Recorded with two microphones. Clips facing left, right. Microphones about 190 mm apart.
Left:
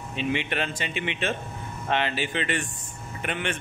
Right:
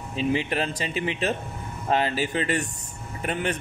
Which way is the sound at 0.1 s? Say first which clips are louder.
Right 3 dB; 35° right (ahead or behind).